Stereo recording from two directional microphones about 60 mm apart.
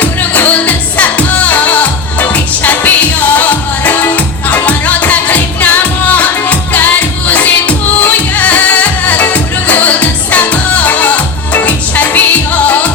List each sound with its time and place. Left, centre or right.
0.0 s music: left